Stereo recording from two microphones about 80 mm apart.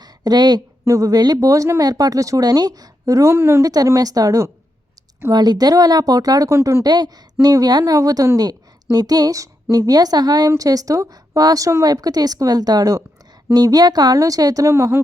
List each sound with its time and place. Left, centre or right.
0.0 s a sound: right
0.9 s a woman's voice: right
3.6 s a woman's voice: right
5.3 s a woman's voice: right
6.5 s speech: right
6.8 s a woman's voice: right
10.6 s a woman's voice: right